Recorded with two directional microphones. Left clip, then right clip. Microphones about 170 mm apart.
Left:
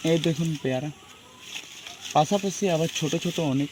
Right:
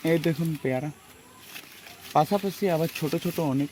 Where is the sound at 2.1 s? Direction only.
40° left (ahead or behind).